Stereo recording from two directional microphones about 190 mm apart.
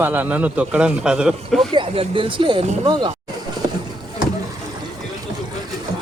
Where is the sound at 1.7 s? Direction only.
30° right (ahead or behind).